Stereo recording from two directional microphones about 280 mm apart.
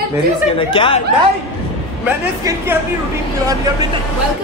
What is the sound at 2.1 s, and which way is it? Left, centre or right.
Speech, centre.